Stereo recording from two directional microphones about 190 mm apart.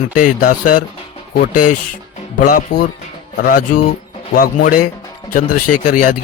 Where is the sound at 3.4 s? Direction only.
50° left (ahead or behind).